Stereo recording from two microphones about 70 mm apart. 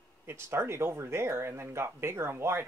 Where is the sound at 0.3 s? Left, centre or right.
Right.